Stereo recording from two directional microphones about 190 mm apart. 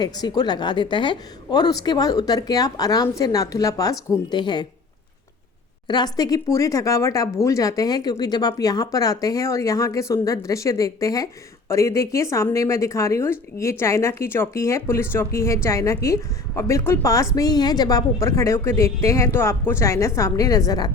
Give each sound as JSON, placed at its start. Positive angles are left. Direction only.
{"t": 0.0, "sound": "a woman's voice", "side_deg": 20}
{"t": 5.9, "sound": "speech", "side_deg": 20}